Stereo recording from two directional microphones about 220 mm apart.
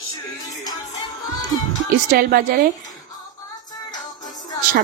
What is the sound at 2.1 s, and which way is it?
Speech, 45° right (ahead or behind).